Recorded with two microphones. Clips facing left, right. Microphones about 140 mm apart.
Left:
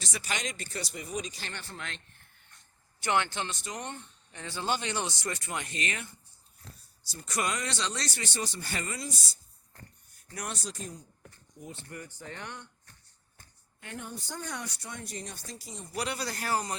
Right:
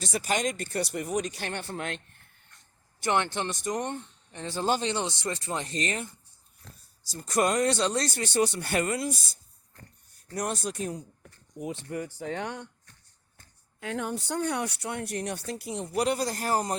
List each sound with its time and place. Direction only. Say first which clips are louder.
0.0 s speech: right 8 dB; 50° right (ahead or behind)
3.5 s speech: right 8 dB; 45° right (ahead or behind)
4.9 s speech: right 4 dB; 25° right (ahead or behind)
7.1 s speech: right 7 dB; 45° right (ahead or behind)
10.2 s speech: right 8 dB; 40° right (ahead or behind); by 11.0 s 65° right (ahead or behind)
11.9 s speech: right 10 dB; 90° right
13.7 s speech: right 9 dB; 90° right; by 16.0 s 65° right (ahead or behind)
16.0 s speech: right 7 dB; 45° right (ahead or behind)